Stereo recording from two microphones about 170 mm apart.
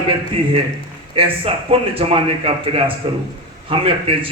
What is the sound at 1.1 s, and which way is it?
A man's voice, 35° right (ahead or behind).